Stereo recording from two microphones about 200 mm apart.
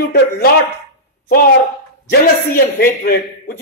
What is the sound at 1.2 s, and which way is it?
A man's voice, 50° left (ahead or behind).